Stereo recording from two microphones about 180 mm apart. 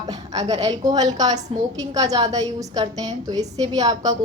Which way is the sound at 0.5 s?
20° right (ahead or behind).